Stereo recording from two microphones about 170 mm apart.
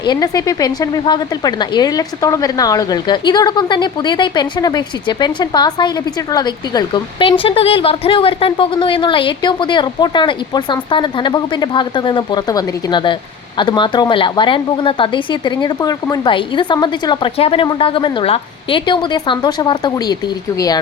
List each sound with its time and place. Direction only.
0.0 s a woman's voice: 25° left (ahead or behind)